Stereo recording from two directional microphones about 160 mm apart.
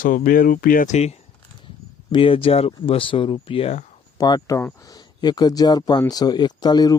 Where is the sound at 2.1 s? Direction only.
35° left (ahead or behind).